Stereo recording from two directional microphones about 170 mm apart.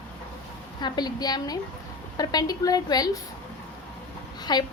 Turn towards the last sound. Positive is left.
turn(degrees=25)  # may be behind; listen again after turning